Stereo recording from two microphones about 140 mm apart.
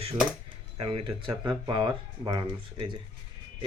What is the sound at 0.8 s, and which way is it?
Speech, 45° right (ahead or behind).